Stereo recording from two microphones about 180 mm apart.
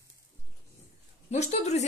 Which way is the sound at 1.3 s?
40° left (ahead or behind).